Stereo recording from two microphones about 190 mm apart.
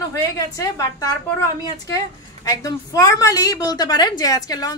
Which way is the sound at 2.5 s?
20° left (ahead or behind).